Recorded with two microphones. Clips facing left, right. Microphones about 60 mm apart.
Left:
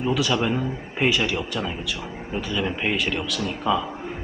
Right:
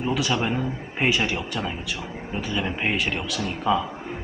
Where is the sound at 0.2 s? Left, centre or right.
Centre; by 3.8 s right.